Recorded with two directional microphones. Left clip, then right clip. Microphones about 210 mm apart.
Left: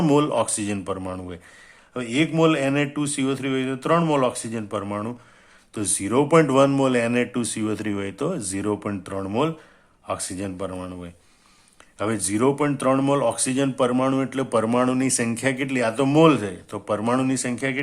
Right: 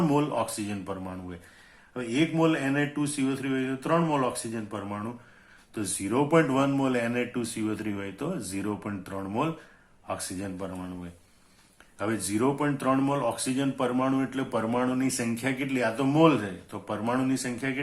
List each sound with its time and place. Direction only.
0.1 s speech: 45° left (ahead or behind)